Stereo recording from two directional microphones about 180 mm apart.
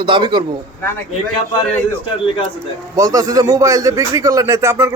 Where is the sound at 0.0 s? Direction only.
25° right (ahead or behind).